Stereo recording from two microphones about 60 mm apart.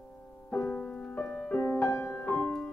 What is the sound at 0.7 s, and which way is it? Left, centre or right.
Music, centre.